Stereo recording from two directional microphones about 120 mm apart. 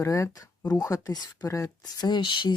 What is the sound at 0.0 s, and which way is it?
Speech, 25° left (ahead or behind).